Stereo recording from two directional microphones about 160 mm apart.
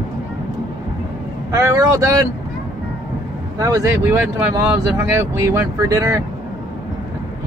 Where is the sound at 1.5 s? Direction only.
20° right (ahead or behind).